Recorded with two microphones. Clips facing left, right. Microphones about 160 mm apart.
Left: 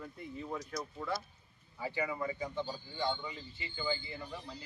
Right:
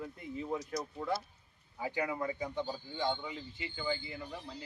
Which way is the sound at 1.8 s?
15° right (ahead or behind).